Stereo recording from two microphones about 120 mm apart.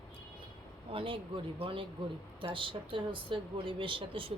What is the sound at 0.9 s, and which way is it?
Speech, 45° right (ahead or behind).